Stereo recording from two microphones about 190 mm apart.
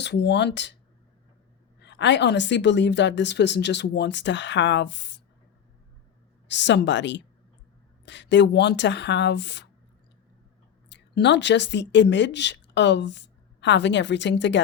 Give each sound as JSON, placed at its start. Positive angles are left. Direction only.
{"t": 0.0, "sound": "speech", "side_deg": 65}
{"t": 1.8, "sound": "a woman's voice", "side_deg": 70}
{"t": 6.5, "sound": "a woman's voice", "side_deg": 65}
{"t": 10.8, "sound": "speech", "side_deg": 65}